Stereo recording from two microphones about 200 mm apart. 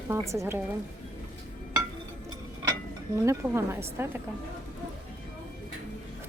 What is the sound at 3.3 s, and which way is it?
Speech, 10° right (ahead or behind).